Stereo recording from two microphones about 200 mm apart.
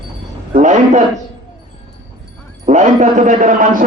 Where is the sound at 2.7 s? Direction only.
40° right (ahead or behind).